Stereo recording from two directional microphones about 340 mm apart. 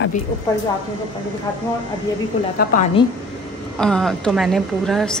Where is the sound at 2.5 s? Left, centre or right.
Left.